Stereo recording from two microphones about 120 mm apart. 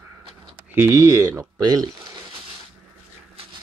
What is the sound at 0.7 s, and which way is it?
Speech, 20° right (ahead or behind).